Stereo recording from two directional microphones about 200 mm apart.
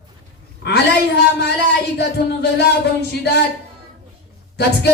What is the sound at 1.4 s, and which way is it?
A man's voice, 55° left (ahead or behind).